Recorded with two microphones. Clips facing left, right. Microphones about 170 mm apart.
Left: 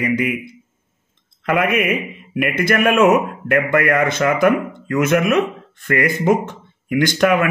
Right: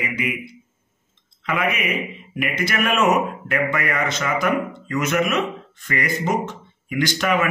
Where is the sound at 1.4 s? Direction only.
50° left (ahead or behind).